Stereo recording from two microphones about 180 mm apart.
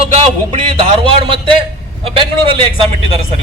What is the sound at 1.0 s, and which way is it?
A man's voice, 30° right (ahead or behind).